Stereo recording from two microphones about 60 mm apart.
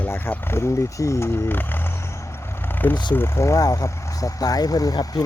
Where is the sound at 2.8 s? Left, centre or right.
Left.